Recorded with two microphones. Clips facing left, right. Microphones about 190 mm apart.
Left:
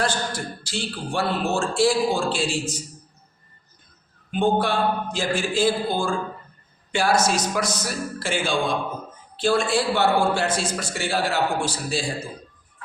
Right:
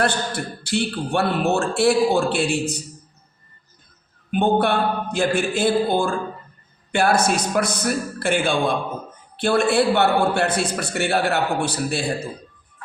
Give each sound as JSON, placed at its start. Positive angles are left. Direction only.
{"t": 0.0, "sound": "a man's voice", "side_deg": -60}
{"t": 4.3, "sound": "a man's voice", "side_deg": -60}